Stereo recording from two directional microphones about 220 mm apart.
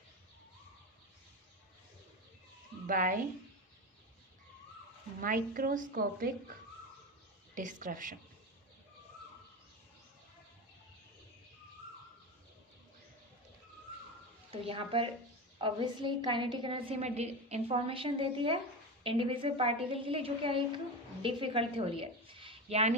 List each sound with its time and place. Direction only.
2.8 s a woman's voice: 35° right (ahead or behind)
5.2 s a woman's voice: 40° right (ahead or behind)
7.5 s a woman's voice: 35° right (ahead or behind)
14.6 s a woman's voice: 25° right (ahead or behind)